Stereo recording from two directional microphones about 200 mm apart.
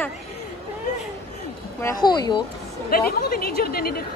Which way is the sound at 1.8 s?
20° left (ahead or behind).